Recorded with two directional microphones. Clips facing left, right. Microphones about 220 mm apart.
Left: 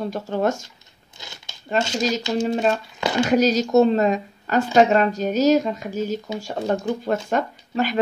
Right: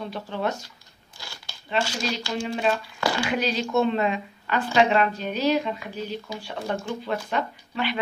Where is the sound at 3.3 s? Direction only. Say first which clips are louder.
Left 11 dB; 40° left (ahead or behind).